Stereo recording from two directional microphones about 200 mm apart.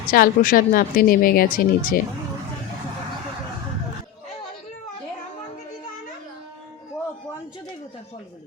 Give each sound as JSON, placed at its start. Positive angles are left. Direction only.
{"t": 0.1, "sound": "a woman's voice", "side_deg": 45}